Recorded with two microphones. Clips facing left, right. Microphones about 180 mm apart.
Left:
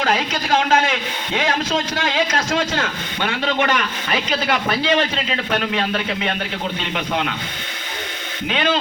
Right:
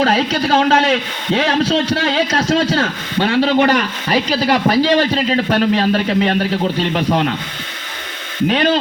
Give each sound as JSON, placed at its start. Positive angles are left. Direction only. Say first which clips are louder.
{"t": 0.0, "sound": "a man's voice", "louder": "right 6 dB", "side_deg": -35}
{"t": 8.4, "sound": "a man's voice", "louder": "right 5 dB", "side_deg": -40}